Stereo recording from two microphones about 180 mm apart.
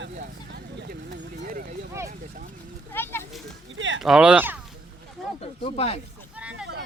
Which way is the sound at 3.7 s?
90° right.